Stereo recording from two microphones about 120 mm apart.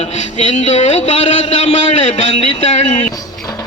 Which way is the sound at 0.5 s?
70° left (ahead or behind).